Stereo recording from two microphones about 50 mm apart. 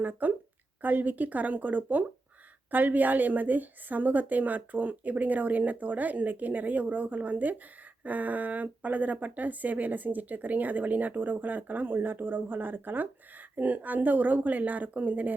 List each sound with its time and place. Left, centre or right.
0.0 s speech: right